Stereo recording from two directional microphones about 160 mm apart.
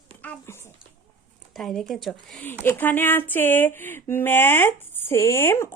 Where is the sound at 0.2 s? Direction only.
15° left (ahead or behind).